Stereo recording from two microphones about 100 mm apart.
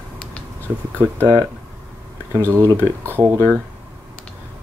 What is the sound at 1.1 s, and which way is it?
Speech, 25° left (ahead or behind).